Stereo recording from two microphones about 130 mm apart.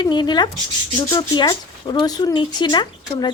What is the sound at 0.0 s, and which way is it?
Speech, 35° left (ahead or behind).